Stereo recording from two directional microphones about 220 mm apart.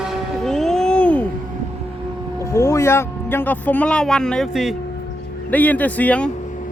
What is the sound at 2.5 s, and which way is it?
Speech, 15° left (ahead or behind).